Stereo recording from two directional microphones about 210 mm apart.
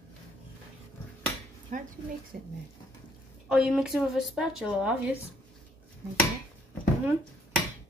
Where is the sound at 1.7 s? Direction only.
35° right (ahead or behind).